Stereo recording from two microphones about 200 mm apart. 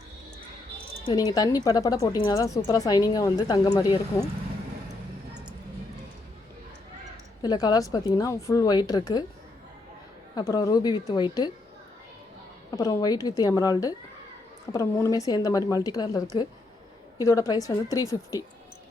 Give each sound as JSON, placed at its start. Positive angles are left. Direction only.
{"t": 1.0, "sound": "speech", "side_deg": 20}
{"t": 7.4, "sound": "a woman's voice", "side_deg": 20}
{"t": 10.3, "sound": "a woman's voice", "side_deg": 20}
{"t": 12.7, "sound": "speech", "side_deg": 15}